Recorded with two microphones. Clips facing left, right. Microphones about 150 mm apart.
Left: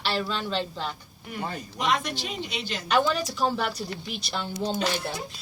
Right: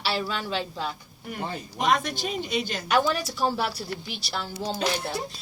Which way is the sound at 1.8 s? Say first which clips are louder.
Right 3 dB; 45° right (ahead or behind).